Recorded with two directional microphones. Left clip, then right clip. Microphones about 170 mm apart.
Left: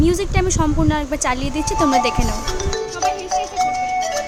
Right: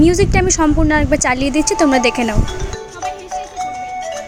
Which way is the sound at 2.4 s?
40° left (ahead or behind).